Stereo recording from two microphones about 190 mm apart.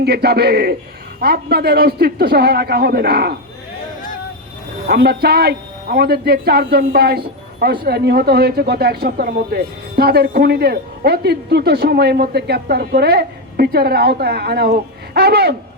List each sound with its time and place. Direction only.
0.0 s a man's voice: 55° right (ahead or behind)
4.9 s a man's voice: 55° right (ahead or behind)